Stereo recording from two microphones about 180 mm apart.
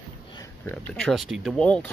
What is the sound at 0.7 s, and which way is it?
Speech, 5° left (ahead or behind).